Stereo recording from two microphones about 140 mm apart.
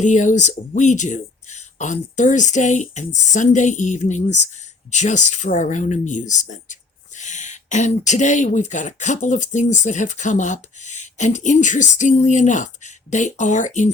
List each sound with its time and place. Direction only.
0.0 s speech: 60° left (ahead or behind)